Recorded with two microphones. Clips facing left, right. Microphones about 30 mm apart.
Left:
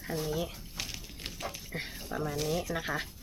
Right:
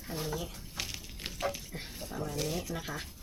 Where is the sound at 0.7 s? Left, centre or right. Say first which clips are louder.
Even; centre.